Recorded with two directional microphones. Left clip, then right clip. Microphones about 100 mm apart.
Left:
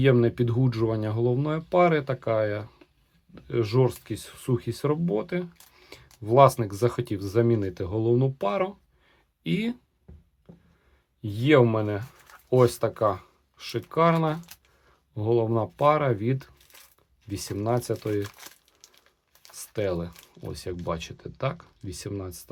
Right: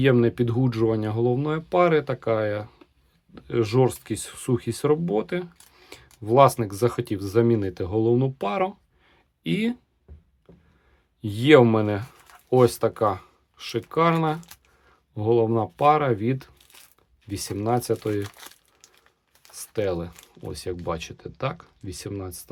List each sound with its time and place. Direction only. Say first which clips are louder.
0.0 s speech: right 2 dB; 25° right (ahead or behind)
3.3 s speech: right 3 dB; 40° right (ahead or behind)
11.2 s speech: right 4 dB; 50° right (ahead or behind)
12.5 s speech: right 2 dB; 30° right (ahead or behind)
18.9 s crumpling: right 1 dB; 20° right (ahead or behind)
19.8 s speech: right 2 dB; 25° right (ahead or behind)